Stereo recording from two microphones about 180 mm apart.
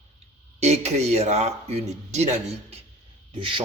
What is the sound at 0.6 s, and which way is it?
A man's voice, 35° right (ahead or behind).